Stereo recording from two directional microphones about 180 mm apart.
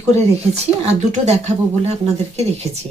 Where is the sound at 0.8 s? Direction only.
40° right (ahead or behind).